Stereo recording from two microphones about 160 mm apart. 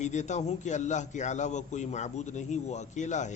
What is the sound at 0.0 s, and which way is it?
A man's voice, 45° left (ahead or behind).